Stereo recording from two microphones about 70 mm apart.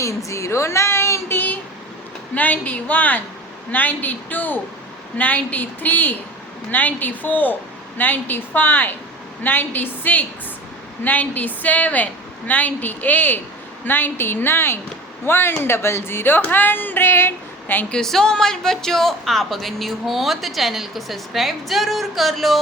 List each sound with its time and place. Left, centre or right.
0.0 s a woman's voice: left
2.3 s a woman's voice: left
17.9 s speech: centre